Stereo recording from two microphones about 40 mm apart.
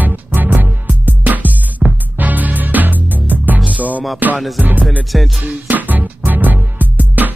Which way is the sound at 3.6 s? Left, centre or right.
Right.